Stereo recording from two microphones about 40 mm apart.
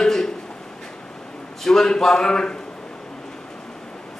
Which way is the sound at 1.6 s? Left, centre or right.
Centre.